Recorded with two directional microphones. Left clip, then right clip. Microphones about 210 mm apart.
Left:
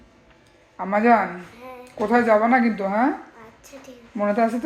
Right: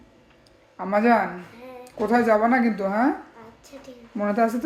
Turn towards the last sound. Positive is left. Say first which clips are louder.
# left 2 dB
turn(degrees=0)  # may be behind; listen again after turning